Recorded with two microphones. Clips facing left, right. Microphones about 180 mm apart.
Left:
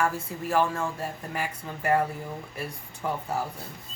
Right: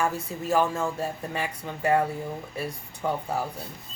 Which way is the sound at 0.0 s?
25° right (ahead or behind).